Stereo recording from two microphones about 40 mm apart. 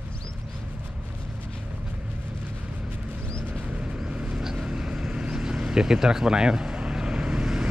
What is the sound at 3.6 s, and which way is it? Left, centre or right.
Vehicle, right.